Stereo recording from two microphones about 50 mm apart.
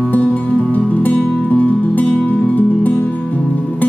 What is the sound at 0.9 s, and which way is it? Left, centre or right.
Music, left.